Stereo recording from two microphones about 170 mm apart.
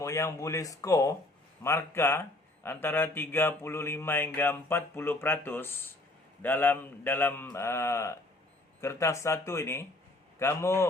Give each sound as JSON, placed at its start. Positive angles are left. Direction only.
{"t": 0.0, "sound": "speech", "side_deg": 20}